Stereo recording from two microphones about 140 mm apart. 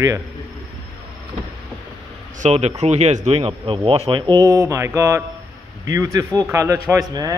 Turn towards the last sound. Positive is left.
turn(degrees=-25)  # may be behind; listen again after turning